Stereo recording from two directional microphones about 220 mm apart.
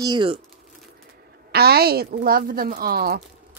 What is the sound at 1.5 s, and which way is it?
Speech, 45° right (ahead or behind).